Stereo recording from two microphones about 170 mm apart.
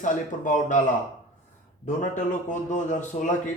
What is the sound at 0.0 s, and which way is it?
Speech, 50° left (ahead or behind).